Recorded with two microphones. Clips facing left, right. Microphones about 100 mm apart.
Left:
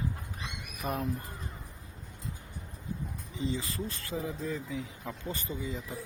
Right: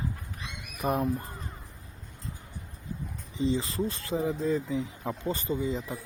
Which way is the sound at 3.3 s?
25° right (ahead or behind).